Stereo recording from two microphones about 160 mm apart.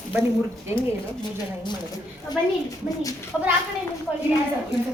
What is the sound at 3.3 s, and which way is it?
Speech, 10° left (ahead or behind).